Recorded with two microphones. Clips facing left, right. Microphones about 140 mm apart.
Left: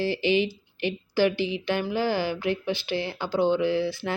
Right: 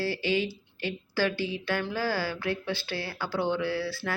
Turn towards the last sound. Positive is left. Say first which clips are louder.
# left 5 dB
turn(degrees=20)  # may be behind; listen again after turning